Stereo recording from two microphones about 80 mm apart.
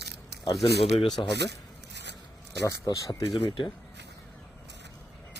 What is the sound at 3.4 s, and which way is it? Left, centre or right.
Speech, left.